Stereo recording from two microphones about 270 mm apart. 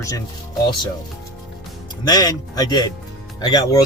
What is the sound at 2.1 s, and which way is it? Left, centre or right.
Speech, centre.